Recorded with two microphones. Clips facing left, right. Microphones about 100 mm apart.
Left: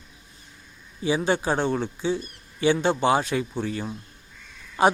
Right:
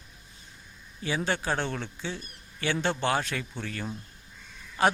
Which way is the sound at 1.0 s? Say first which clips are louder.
Left 6 dB; 15° left (ahead or behind).